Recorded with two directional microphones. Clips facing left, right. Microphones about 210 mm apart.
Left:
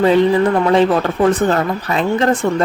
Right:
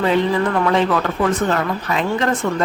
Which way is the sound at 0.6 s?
30° left (ahead or behind).